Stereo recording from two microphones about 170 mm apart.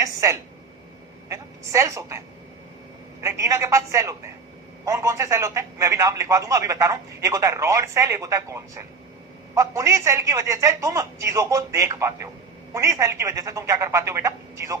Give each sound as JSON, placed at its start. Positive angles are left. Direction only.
{"t": 0.0, "sound": "a sound", "side_deg": -20}
{"t": 1.3, "sound": "speech", "side_deg": -20}
{"t": 3.2, "sound": "speech", "side_deg": -20}